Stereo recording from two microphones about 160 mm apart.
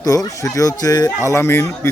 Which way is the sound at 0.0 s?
20° left (ahead or behind).